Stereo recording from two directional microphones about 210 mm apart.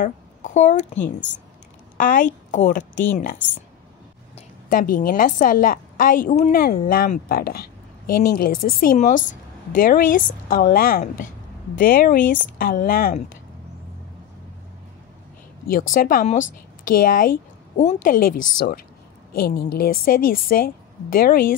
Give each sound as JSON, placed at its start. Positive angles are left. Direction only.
{"t": 0.0, "sound": "speech", "side_deg": 35}
{"t": 2.0, "sound": "speech", "side_deg": 35}
{"t": 3.4, "sound": "speech", "side_deg": 5}
{"t": 4.4, "sound": "a woman's voice", "side_deg": 40}
{"t": 15.9, "sound": "a woman's voice", "side_deg": 40}